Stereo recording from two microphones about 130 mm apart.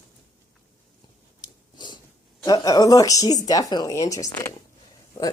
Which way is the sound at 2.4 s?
30° left (ahead or behind).